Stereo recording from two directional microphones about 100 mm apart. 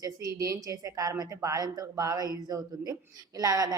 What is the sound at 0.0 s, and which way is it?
A woman's voice, 35° right (ahead or behind).